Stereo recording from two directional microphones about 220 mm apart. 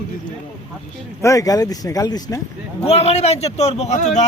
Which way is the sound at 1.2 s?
15° left (ahead or behind).